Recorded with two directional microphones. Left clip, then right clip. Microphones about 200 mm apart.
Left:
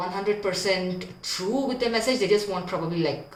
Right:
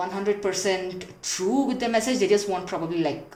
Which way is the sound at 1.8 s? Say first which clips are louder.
Right 1 dB; 40° right (ahead or behind).